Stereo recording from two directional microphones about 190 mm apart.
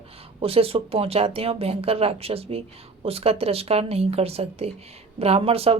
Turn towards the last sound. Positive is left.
turn(degrees=-30)  # may be behind; listen again after turning